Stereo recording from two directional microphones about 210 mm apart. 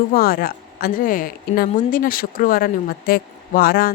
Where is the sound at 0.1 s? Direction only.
45° left (ahead or behind).